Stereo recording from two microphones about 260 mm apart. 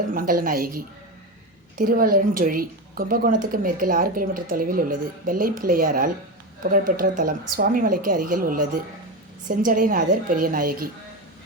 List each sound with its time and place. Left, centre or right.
0.1 s a woman's voice: right
1.8 s a woman's voice: right